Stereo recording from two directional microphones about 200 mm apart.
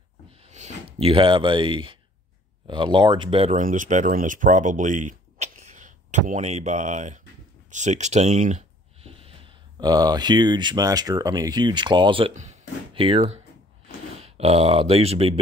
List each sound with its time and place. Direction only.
0.4 s speech: 35° right (ahead or behind)